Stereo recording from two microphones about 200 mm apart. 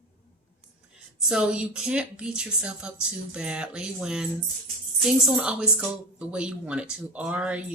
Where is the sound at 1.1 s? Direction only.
5° right (ahead or behind).